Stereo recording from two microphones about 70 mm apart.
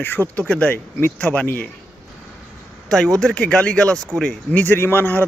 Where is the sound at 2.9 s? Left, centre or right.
Centre.